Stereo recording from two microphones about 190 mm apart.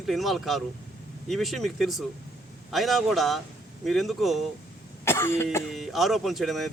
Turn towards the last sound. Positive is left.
turn(degrees=0)  # may be behind; listen again after turning